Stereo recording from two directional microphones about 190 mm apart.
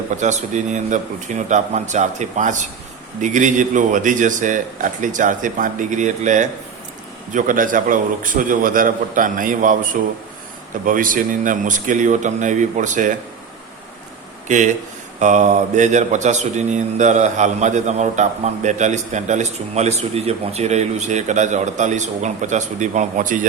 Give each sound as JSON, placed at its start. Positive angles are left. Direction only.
{"t": 0.2, "sound": "a man's voice", "side_deg": -40}
{"t": 14.4, "sound": "speech", "side_deg": -40}